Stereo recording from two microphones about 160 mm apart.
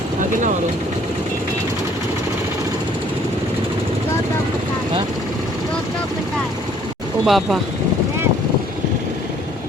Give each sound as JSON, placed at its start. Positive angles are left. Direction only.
{"t": 0.2, "sound": "vehicle", "side_deg": -55}
{"t": 7.3, "sound": "speech", "side_deg": 0}